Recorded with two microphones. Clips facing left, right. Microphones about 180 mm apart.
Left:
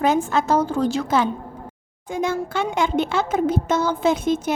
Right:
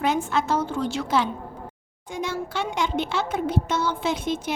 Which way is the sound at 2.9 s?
45° left (ahead or behind).